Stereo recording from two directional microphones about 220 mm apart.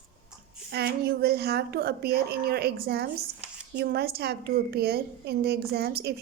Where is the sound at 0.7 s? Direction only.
45° right (ahead or behind).